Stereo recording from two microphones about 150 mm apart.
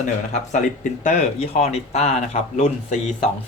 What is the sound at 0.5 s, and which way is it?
Speech, 55° left (ahead or behind).